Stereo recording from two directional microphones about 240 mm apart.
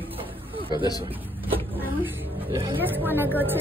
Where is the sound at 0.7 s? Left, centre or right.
Centre.